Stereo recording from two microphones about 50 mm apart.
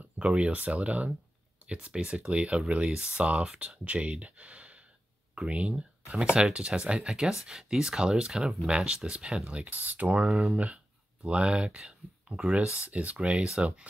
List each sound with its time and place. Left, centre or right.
0.2 s speech: right
11.2 s speech: centre